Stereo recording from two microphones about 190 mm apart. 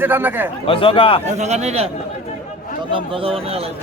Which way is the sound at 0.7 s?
30° left (ahead or behind).